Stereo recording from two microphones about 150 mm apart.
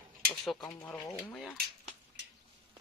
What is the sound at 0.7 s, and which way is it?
Speech, 10° left (ahead or behind).